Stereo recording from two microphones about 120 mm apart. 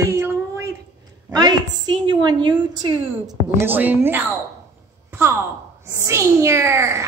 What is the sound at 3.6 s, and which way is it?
Speech, 15° right (ahead or behind).